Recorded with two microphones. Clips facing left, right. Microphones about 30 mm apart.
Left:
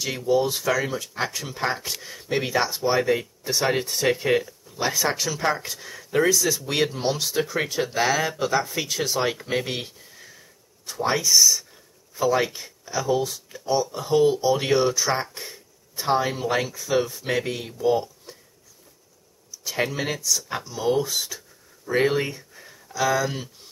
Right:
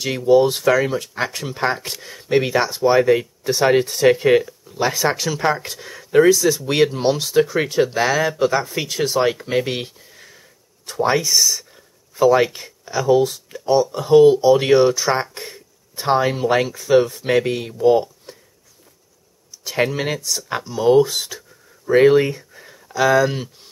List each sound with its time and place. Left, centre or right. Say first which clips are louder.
0.0 s speech: right 8 dB; right
3.0 s speech: right 7 dB; centre
7.8 s speech: right 5 dB; centre
9.3 s speech: right 5 dB; centre
9.8 s a sound: right 5 dB; right
12.5 s speech: right 5 dB; right
13.0 s speech: right 9 dB; right
19.6 s speech: right 5 dB; right